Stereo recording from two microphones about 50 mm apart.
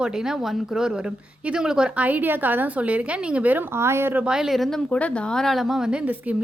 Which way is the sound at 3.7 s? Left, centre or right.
Right.